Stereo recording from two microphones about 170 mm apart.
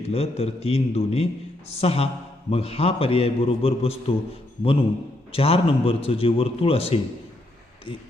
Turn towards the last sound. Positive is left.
turn(degrees=35)  # may be behind; listen again after turning